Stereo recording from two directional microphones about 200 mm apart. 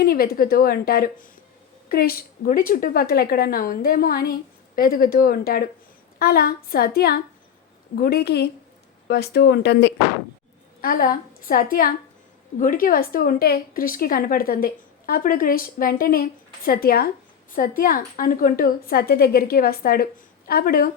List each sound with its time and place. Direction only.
0.0 s a woman's voice: 50° left (ahead or behind)
10.8 s a woman's voice: 45° left (ahead or behind)